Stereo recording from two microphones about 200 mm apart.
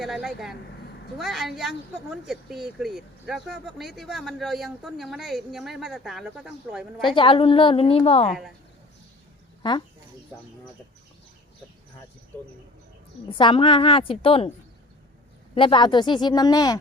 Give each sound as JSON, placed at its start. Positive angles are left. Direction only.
{"t": 0.0, "sound": "speech", "side_deg": 0}
{"t": 7.2, "sound": "speech", "side_deg": 25}
{"t": 13.3, "sound": "speech", "side_deg": 25}
{"t": 15.5, "sound": "speech", "side_deg": 25}